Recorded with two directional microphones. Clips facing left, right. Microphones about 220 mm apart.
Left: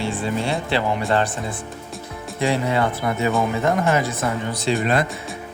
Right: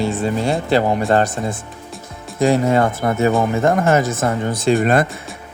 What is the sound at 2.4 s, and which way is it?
Speech, 45° right (ahead or behind).